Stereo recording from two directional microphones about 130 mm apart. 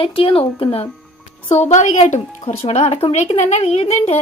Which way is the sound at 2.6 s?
55° left (ahead or behind).